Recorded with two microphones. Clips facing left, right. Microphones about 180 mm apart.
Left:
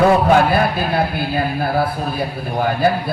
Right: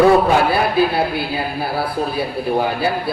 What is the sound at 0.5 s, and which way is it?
A man's voice, 50° left (ahead or behind).